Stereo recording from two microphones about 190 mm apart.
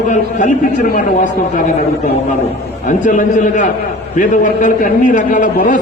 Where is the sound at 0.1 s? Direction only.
40° left (ahead or behind).